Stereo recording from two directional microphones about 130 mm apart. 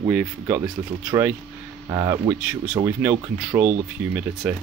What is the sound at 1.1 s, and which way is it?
Speech, 30° right (ahead or behind).